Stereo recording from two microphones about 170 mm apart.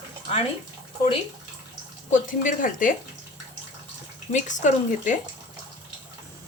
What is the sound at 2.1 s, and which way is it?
Speech, 50° left (ahead or behind).